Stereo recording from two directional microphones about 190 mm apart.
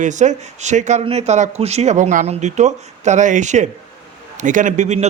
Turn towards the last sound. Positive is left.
turn(degrees=-40)  # may be behind; listen again after turning